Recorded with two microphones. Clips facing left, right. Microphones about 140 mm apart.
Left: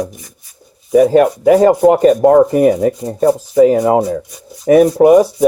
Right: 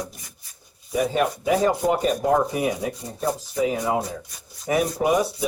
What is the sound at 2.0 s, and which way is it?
Speech, 75° left (ahead or behind).